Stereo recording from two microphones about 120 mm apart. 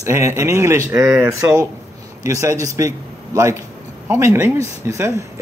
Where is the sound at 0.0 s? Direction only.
25° right (ahead or behind).